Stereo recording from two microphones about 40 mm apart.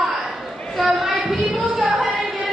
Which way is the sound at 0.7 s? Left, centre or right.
Centre.